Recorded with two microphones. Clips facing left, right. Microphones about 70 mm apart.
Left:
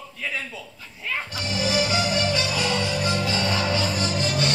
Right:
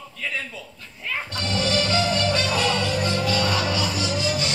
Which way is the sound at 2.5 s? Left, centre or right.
Centre.